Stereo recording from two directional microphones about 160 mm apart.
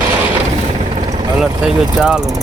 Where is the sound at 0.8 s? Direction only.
35° right (ahead or behind).